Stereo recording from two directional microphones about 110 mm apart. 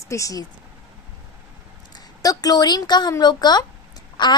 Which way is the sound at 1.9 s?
35° left (ahead or behind).